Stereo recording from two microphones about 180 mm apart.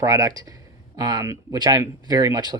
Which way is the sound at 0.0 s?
20° right (ahead or behind).